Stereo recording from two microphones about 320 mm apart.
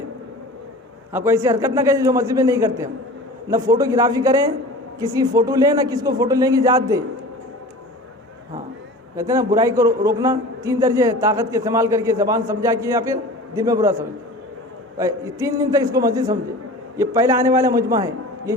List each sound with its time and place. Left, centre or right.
1.1 s a man's voice: centre
9.1 s a man's voice: centre
14.9 s a man's voice: centre